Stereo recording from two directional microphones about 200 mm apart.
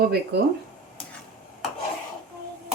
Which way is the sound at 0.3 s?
55° right (ahead or behind).